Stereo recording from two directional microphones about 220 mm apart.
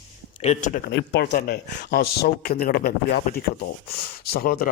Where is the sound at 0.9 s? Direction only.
50° left (ahead or behind).